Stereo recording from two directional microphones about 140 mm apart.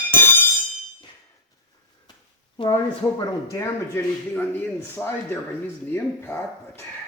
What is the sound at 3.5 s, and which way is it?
Speech, 20° left (ahead or behind).